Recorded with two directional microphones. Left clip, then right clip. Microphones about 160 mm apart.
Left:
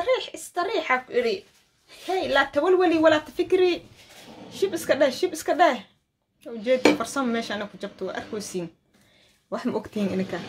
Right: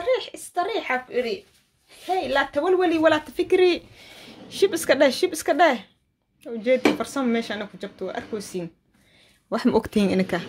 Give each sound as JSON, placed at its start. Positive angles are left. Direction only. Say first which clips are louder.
{"t": 0.0, "sound": "a sound", "louder": "even", "side_deg": -15}
{"t": 1.9, "sound": "a woman's voice", "louder": "right 1 dB", "side_deg": -5}
{"t": 4.5, "sound": "a woman's voice", "louder": "right 4 dB", "side_deg": -45}
{"t": 9.5, "sound": "speech", "louder": "right 7 dB", "side_deg": -55}